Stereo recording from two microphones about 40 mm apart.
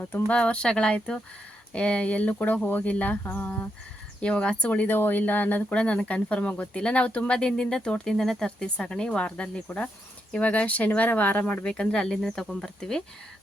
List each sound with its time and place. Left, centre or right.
0.3 s speech: left
4.2 s speech: left
4.7 s speech: left
5.7 s speech: left
8.1 s speech: centre
8.4 s speech: left
11.6 s speech: centre
12.2 s speech: centre